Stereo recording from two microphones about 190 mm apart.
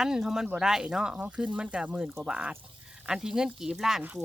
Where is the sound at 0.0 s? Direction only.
5° right (ahead or behind).